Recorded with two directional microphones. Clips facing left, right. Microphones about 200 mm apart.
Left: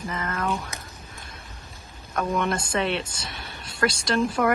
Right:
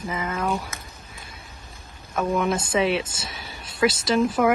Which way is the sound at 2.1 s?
5° right (ahead or behind).